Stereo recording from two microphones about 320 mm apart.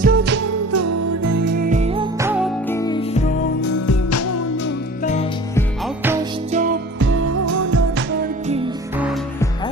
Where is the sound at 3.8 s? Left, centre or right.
Left.